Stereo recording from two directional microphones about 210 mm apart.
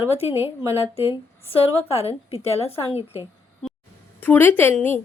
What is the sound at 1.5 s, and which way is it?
A woman's voice, 30° left (ahead or behind).